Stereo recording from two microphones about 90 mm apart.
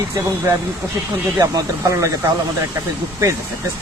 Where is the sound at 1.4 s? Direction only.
35° right (ahead or behind).